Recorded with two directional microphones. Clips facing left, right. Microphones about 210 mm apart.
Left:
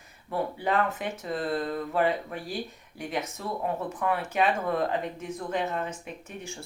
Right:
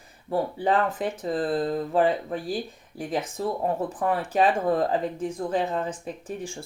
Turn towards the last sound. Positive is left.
turn(degrees=-30)  # may be behind; listen again after turning